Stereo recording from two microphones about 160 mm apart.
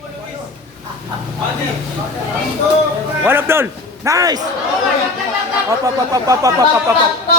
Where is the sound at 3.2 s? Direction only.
15° right (ahead or behind).